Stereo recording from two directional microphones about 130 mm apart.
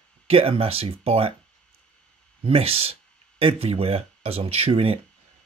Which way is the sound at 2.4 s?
50° right (ahead or behind).